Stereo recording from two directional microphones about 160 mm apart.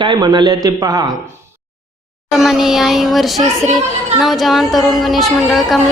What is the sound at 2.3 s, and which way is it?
Speech, centre (ahead or behind).